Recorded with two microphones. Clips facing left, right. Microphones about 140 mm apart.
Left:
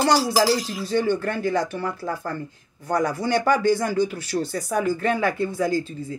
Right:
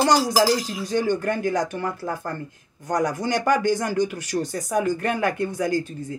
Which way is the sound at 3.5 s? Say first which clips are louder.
Left 1 dB; 45° right (ahead or behind).